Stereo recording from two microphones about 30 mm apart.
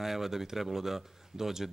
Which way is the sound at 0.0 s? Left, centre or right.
Centre.